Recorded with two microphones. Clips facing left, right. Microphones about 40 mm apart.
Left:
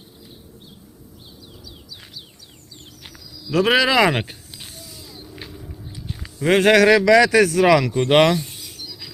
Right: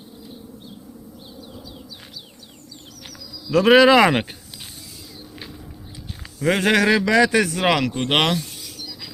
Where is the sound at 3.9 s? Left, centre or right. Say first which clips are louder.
Right 2 dB; centre.